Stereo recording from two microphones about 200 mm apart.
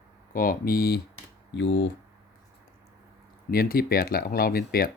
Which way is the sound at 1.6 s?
65° left (ahead or behind).